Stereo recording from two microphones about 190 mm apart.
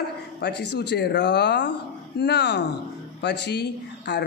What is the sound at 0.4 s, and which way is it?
Speech, 60° left (ahead or behind).